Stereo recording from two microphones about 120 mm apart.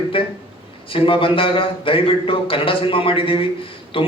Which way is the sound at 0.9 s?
45° left (ahead or behind).